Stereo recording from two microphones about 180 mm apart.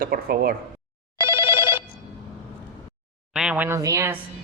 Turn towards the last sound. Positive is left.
turn(degrees=-15)  # may be behind; listen again after turning